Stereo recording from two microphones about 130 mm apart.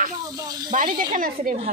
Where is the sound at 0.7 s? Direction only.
85° right.